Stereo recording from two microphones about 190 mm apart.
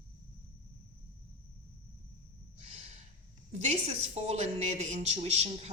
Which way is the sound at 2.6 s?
35° right (ahead or behind).